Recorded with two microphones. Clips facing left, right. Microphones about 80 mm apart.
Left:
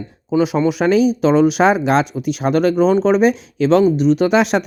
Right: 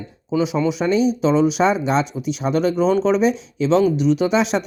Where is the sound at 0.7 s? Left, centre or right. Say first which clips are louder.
Left 4 dB; left.